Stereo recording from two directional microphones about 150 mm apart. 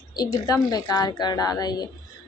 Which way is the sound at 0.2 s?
25° left (ahead or behind).